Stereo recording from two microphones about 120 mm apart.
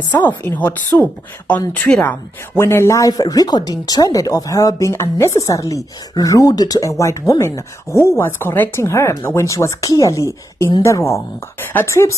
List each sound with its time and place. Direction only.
0.1 s speech: 25° left (ahead or behind); by 2.1 s 10° left (ahead or behind)
2.5 s speech: 20° left (ahead or behind)